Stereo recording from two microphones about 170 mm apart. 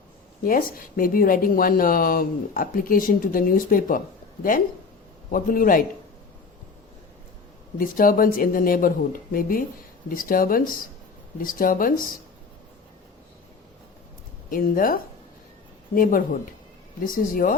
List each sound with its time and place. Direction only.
0.4 s speech: 55° left (ahead or behind)
5.3 s speech: 55° left (ahead or behind)
7.8 s speech: 55° left (ahead or behind)
14.5 s speech: 55° left (ahead or behind)